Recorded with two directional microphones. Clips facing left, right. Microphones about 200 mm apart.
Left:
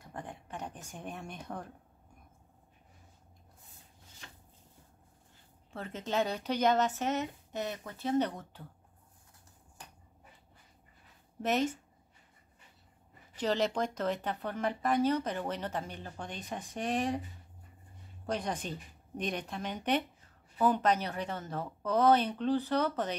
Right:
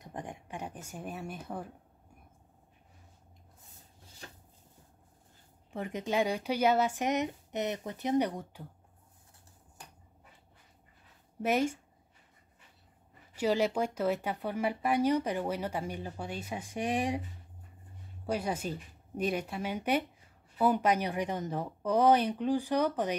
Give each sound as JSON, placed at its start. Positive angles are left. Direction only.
{"t": 0.0, "sound": "a sound", "side_deg": -15}
{"t": 4.2, "sound": "chopping", "side_deg": -40}
{"t": 5.7, "sound": "a woman's voice", "side_deg": -15}
{"t": 11.4, "sound": "a woman's voice", "side_deg": -10}
{"t": 13.4, "sound": "a woman's voice", "side_deg": -10}
{"t": 18.2, "sound": "a woman's voice", "side_deg": -5}